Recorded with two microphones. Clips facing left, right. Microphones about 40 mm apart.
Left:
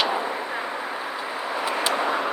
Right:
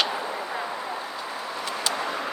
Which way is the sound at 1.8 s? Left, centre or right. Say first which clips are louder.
Left 4 dB; left.